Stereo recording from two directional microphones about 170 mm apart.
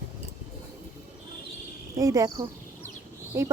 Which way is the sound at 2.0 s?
20° right (ahead or behind).